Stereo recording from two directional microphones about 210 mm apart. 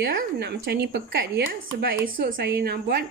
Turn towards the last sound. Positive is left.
turn(degrees=-50)  # may be behind; listen again after turning